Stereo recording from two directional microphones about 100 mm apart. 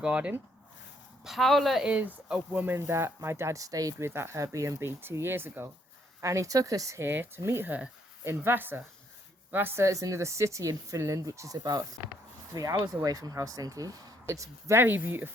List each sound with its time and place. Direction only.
0.0 s speech: 10° right (ahead or behind)
1.2 s speech: centre (ahead or behind)
2.3 s speech: 15° right (ahead or behind); by 3.9 s 35° right (ahead or behind)
3.9 s speech: 25° right (ahead or behind)
12.8 s speech: 35° right (ahead or behind); by 15.3 s 20° right (ahead or behind)